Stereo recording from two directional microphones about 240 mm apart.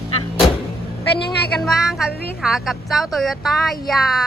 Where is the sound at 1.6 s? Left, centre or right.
Centre.